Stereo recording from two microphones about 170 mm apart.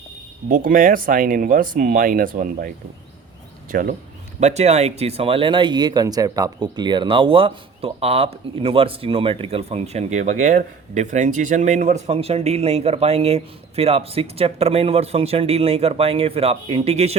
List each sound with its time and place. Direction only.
0.4 s speech: 55° right (ahead or behind)
3.7 s speech: 55° right (ahead or behind)
4.4 s speech: 40° right (ahead or behind)